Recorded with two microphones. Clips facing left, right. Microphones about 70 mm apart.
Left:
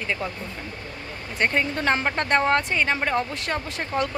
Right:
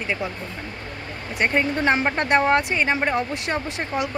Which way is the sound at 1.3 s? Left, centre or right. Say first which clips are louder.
Right 2 dB; centre.